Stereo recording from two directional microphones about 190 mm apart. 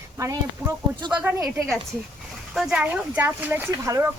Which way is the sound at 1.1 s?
5° right (ahead or behind).